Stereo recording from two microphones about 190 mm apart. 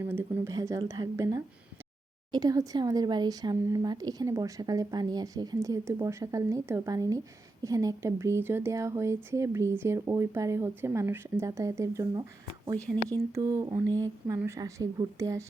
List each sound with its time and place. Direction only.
0.0 s speech: 10° right (ahead or behind)